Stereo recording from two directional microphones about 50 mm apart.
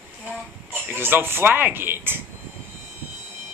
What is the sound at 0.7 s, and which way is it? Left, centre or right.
Speech, right.